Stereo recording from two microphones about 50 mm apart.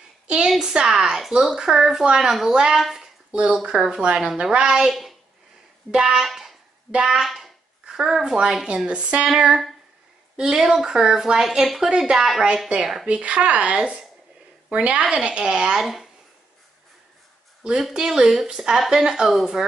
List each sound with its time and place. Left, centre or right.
0.5 s a woman's voice: centre
3.3 s speech: right
7.2 s a sound: centre
7.9 s speech: centre
11.6 s speech: centre
17.8 s speech: centre